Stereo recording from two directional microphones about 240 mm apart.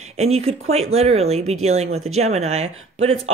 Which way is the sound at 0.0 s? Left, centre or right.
Right.